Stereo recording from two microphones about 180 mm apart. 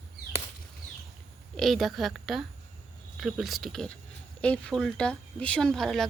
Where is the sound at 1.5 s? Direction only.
Centre (ahead or behind).